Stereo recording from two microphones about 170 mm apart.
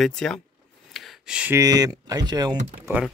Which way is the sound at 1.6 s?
20° right (ahead or behind).